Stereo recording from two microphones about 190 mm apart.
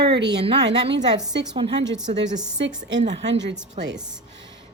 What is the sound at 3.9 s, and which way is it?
Speech, 5° right (ahead or behind).